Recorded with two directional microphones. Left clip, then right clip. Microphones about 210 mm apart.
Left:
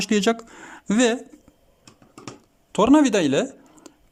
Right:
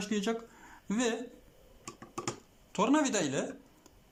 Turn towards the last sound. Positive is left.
turn(degrees=45)  # may be behind; listen again after turning